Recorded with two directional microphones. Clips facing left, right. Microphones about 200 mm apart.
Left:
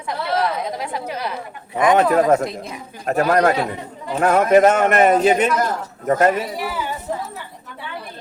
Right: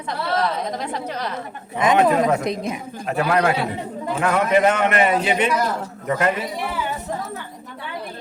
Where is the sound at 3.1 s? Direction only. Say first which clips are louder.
Left 3 dB; 45° left (ahead or behind).